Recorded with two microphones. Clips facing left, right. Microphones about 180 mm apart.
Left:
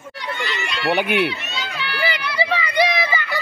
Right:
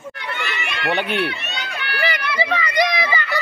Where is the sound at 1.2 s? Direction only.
65° right (ahead or behind).